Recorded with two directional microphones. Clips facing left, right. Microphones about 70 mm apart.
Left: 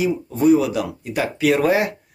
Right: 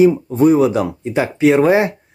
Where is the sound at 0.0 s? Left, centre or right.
Right.